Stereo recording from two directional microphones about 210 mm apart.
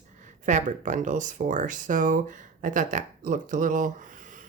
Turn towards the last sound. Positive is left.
turn(degrees=-40)  # may be behind; listen again after turning